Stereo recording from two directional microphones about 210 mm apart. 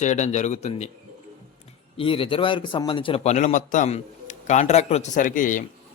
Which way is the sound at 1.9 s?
25° left (ahead or behind).